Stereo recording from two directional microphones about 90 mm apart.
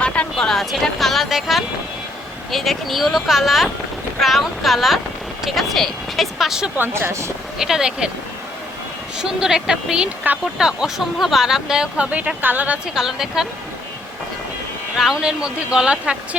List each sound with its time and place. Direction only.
0.0 s speech: 10° left (ahead or behind)
6.7 s speech: 25° right (ahead or behind)
7.6 s speech: 5° right (ahead or behind)
9.1 s speech: 5° right (ahead or behind)
12.9 s speech: 5° right (ahead or behind)
14.9 s speech: 5° right (ahead or behind)